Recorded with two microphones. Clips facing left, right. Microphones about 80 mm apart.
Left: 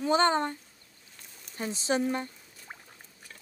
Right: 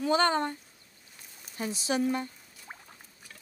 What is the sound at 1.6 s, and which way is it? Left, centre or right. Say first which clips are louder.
Speech: left 1 dB; left.